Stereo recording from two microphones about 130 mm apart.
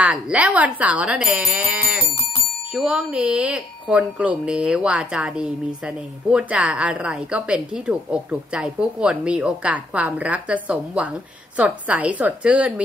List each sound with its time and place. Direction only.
0.0 s speech: 10° right (ahead or behind)